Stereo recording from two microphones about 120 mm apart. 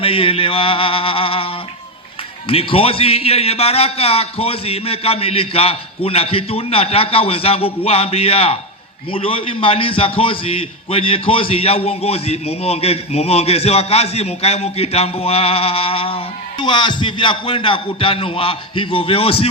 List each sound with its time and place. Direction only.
0.0 s a man's voice: 50° left (ahead or behind)